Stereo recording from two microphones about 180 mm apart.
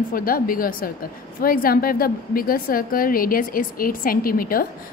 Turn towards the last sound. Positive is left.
turn(degrees=55)  # may be behind; listen again after turning